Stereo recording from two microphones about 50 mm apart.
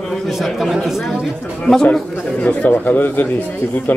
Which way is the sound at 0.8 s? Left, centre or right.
Centre.